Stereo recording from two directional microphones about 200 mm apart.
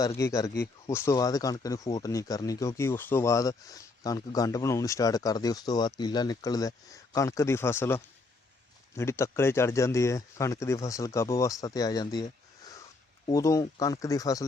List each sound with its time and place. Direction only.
0.2 s speech: 15° left (ahead or behind)
13.2 s speech: 15° left (ahead or behind)